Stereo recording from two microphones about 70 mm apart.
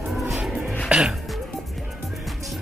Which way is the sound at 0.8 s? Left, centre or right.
Centre.